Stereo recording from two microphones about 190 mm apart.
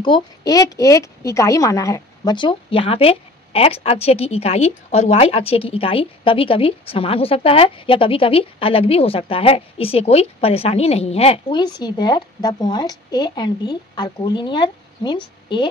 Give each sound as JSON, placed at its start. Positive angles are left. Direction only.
{"t": 0.0, "sound": "a woman's voice", "side_deg": 20}